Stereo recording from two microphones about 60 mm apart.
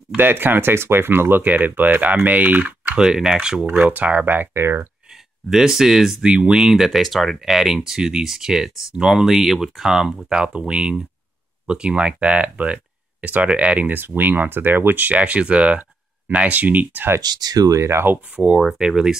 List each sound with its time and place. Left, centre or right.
0.2 s speech: right
3.0 s speech: centre; by 4.5 s right
5.5 s speech: centre
13.9 s speech: right
17.5 s speech: right
17.8 s speech: right
18.8 s speech: centre